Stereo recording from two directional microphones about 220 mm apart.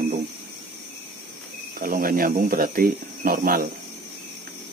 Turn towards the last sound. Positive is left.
turn(degrees=-40)  # may be behind; listen again after turning